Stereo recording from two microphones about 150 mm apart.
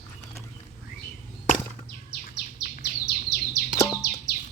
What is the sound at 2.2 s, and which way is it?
Bird, 70° left (ahead or behind).